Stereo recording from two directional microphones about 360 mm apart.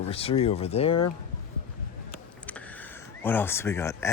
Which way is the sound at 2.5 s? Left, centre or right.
Centre.